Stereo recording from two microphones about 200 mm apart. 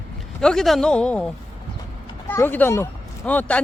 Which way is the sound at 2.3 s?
10° left (ahead or behind).